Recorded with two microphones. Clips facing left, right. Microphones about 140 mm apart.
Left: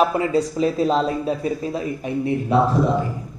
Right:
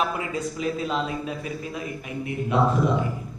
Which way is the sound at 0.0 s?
35° left (ahead or behind).